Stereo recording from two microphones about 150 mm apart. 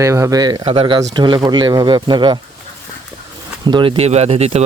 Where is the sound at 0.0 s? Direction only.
20° right (ahead or behind).